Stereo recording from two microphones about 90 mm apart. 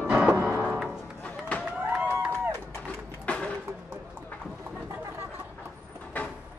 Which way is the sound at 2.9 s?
15° left (ahead or behind).